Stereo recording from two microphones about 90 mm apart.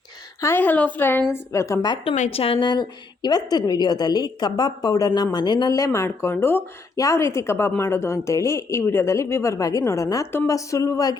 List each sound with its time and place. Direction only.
0.4 s a woman's voice: 20° left (ahead or behind)
1.3 s a woman's voice: 35° left (ahead or behind)
2.0 s speech: 90° left
2.6 s a woman's voice: 55° left (ahead or behind)
5.7 s a woman's voice: 35° left (ahead or behind)
6.9 s a woman's voice: 35° left (ahead or behind)